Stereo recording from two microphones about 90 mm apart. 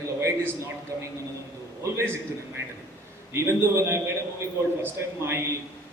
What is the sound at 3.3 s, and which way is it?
A man's voice, 30° right (ahead or behind).